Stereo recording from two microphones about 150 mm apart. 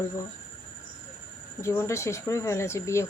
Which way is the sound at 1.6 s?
20° left (ahead or behind).